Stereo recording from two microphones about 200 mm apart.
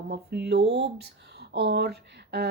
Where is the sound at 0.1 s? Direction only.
55° right (ahead or behind).